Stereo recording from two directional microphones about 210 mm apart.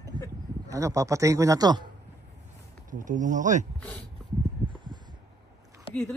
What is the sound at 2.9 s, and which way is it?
Speech, 40° right (ahead or behind).